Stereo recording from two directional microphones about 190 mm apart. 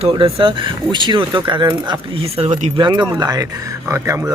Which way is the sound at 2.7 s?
25° right (ahead or behind).